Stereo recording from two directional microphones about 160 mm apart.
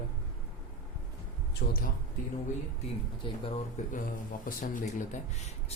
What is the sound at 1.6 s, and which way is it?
Speech, 90° left.